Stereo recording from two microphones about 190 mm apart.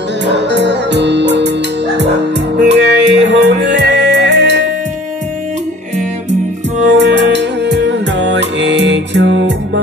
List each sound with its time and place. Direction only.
0.3 s music: 65° right (ahead or behind)
2.6 s music: 65° right (ahead or behind)
6.9 s music: 65° right (ahead or behind)